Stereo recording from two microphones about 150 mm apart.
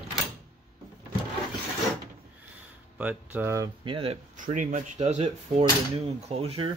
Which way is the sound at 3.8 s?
35° right (ahead or behind).